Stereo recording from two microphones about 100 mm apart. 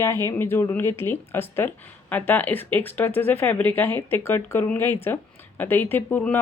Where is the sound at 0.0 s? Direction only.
25° left (ahead or behind).